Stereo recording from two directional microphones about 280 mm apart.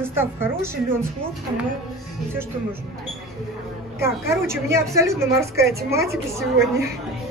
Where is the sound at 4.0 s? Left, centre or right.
Centre.